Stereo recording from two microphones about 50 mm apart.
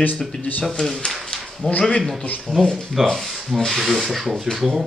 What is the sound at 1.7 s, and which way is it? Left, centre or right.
Speech, left.